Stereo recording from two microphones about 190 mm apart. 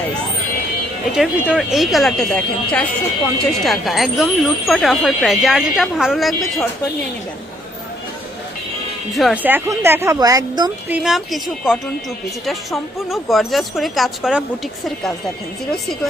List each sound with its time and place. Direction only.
1.1 s speech: centre (ahead or behind)
9.1 s speech: 5° right (ahead or behind); by 10.7 s 20° right (ahead or behind)
10.8 s speech: 5° right (ahead or behind)